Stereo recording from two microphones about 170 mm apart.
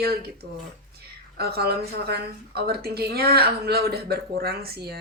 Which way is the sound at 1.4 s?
70° right (ahead or behind).